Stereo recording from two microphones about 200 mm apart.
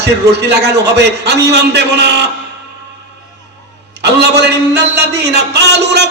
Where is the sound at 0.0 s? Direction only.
55° right (ahead or behind).